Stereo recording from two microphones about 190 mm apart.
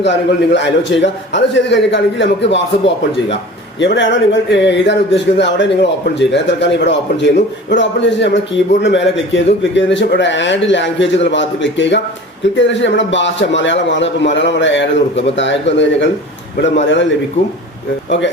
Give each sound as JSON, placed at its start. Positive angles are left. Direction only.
{"t": 0.0, "sound": "a man's voice", "side_deg": 70}
{"t": 3.8, "sound": "a man's voice", "side_deg": 70}